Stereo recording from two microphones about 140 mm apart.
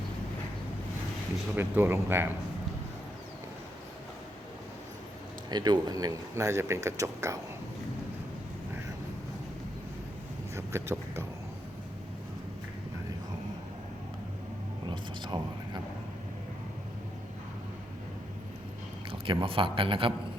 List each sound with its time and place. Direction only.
1.5 s a man's voice: 15° right (ahead or behind)
5.5 s speech: 30° right (ahead or behind)
10.5 s speech: 20° right (ahead or behind)
14.8 s a sound: 35° right (ahead or behind)
19.2 s a man's voice: 40° right (ahead or behind)